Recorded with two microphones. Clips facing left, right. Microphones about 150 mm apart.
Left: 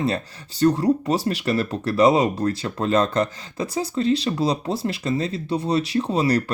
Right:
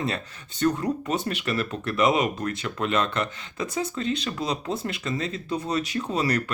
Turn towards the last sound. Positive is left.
turn(degrees=35)  # may be behind; listen again after turning